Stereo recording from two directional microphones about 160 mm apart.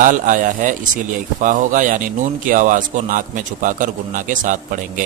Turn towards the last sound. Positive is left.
turn(degrees=-55)  # may be behind; listen again after turning